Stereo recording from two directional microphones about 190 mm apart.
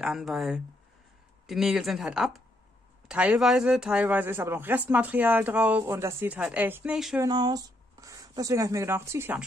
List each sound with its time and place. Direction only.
0.0 s speech: centre (ahead or behind)
7.2 s speech: 20° right (ahead or behind)